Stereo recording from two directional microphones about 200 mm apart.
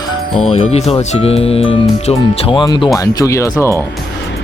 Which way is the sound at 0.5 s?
30° left (ahead or behind).